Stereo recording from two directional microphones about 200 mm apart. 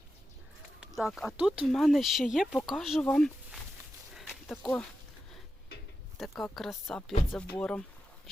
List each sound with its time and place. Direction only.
0.8 s speech: centre (ahead or behind)
4.1 s a sound: centre (ahead or behind)
4.6 s speech: 5° left (ahead or behind)
6.4 s speech: centre (ahead or behind)